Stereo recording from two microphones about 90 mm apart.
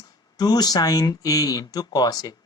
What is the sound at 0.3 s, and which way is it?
Speech, 50° left (ahead or behind).